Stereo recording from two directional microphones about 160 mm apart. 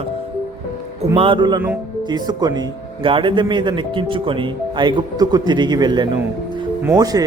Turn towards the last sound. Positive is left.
turn(degrees=-25)  # may be behind; listen again after turning